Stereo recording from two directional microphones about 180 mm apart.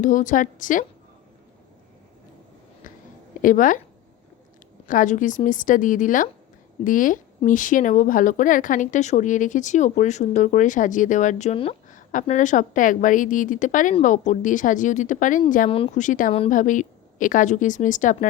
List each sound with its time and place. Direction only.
0.0 s speech: 45° left (ahead or behind)
3.4 s speech: 45° left (ahead or behind)
4.9 s speech: 45° left (ahead or behind)
11.9 s speech: 45° left (ahead or behind)